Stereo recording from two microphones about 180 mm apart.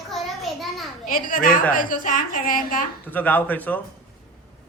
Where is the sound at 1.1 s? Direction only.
50° left (ahead or behind).